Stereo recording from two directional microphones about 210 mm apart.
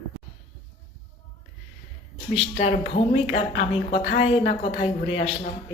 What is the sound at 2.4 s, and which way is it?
A woman's voice, 30° left (ahead or behind).